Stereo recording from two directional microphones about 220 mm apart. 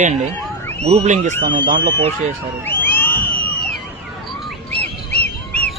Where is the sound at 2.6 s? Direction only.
10° left (ahead or behind).